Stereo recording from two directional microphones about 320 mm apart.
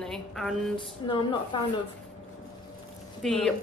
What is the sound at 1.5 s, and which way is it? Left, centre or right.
Speech, centre.